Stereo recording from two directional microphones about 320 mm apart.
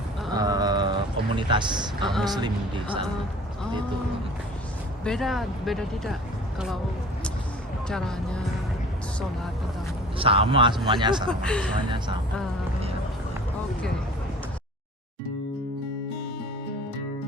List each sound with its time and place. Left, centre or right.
0.3 s a sound: centre
2.2 s speech: centre
5.0 s speech: centre
7.9 s speech: centre
10.2 s speech: centre
11.3 s speech: centre